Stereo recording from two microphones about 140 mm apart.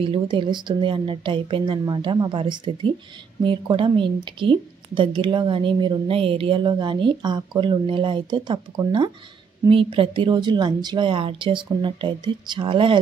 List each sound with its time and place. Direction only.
0.0 s a woman's voice: 35° right (ahead or behind)